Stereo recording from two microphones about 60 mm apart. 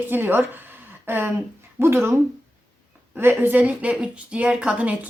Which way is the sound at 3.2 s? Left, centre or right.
Right.